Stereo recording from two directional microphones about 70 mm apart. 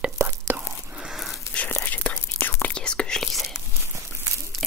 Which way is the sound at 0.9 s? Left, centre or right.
Centre.